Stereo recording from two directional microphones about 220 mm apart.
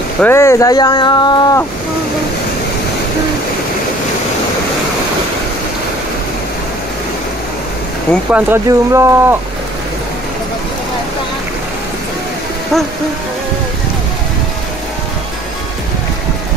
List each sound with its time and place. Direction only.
0.2 s speech: 10° left (ahead or behind)
8.3 s speech: 10° right (ahead or behind)